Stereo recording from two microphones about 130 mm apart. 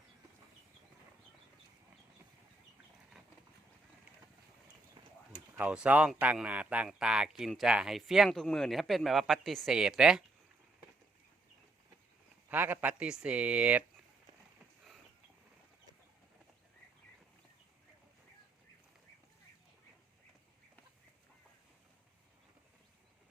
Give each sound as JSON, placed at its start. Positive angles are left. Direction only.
{"t": 5.0, "sound": "a sound", "side_deg": -35}
{"t": 5.3, "sound": "speech", "side_deg": -10}
{"t": 12.5, "sound": "speech", "side_deg": -15}